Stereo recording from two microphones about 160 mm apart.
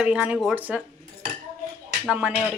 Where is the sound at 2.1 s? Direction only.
10° right (ahead or behind).